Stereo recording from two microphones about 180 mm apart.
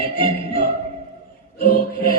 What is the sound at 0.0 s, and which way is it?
Music, 50° left (ahead or behind).